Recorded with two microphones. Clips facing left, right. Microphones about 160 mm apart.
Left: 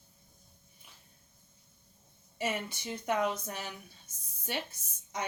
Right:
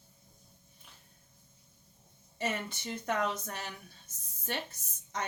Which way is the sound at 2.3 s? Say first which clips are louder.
Left 1 dB; 10° left (ahead or behind).